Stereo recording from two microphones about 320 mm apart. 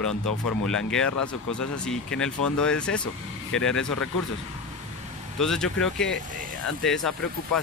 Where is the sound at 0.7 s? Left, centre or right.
Centre.